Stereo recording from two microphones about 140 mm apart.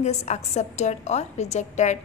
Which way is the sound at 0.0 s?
55° left (ahead or behind).